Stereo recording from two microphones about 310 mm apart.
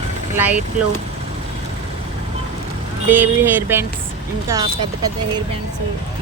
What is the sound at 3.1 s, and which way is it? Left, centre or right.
Speech, centre.